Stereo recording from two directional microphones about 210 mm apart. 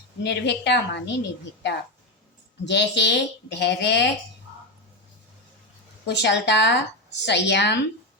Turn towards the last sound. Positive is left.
turn(degrees=55)  # may be behind; listen again after turning